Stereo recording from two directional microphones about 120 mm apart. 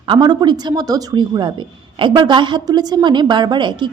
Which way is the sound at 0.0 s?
40° right (ahead or behind).